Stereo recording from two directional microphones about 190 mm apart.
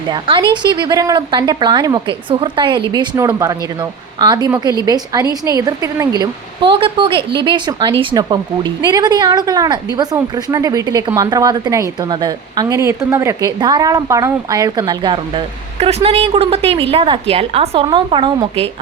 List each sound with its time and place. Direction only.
0.1 s a woman's voice: 25° right (ahead or behind)